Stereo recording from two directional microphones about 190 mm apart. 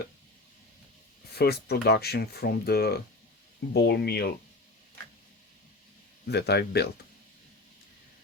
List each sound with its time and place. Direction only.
1.4 s speech: 55° left (ahead or behind)
6.2 s speech: 60° left (ahead or behind)